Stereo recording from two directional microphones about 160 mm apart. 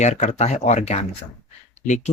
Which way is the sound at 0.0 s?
45° left (ahead or behind).